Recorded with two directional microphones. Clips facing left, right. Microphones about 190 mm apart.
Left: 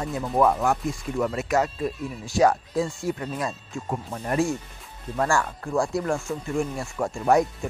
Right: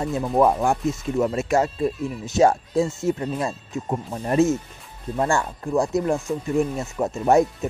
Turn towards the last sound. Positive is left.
turn(degrees=-25)  # may be behind; listen again after turning